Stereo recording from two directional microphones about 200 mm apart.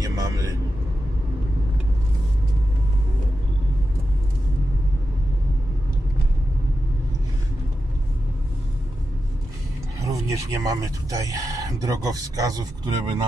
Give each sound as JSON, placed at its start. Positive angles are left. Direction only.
{"t": 0.0, "sound": "a man's voice", "side_deg": -15}
{"t": 9.9, "sound": "speech", "side_deg": -15}